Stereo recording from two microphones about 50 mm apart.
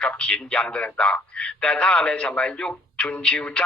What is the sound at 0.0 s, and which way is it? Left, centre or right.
A man's voice, left.